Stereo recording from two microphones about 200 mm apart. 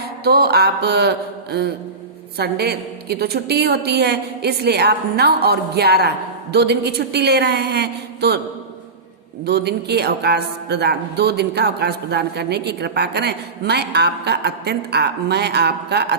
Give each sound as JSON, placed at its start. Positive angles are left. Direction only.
{"t": 0.3, "sound": "a woman's voice", "side_deg": -50}
{"t": 9.5, "sound": "speech", "side_deg": -55}